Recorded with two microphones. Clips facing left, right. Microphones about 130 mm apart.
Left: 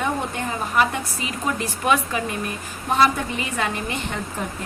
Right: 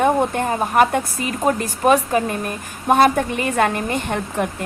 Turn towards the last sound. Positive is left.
turn(degrees=-65)  # may be behind; listen again after turning